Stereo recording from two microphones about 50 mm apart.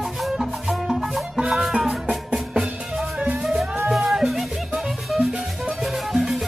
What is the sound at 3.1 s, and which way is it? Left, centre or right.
Music, right.